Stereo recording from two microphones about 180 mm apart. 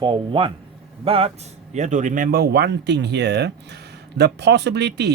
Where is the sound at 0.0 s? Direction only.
25° right (ahead or behind).